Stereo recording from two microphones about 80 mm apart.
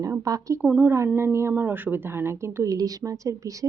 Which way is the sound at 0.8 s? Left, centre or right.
Right.